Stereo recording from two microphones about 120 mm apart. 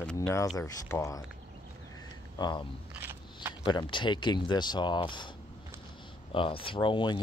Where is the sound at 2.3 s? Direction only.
35° left (ahead or behind).